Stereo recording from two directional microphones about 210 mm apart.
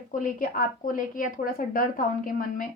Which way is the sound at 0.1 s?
40° left (ahead or behind).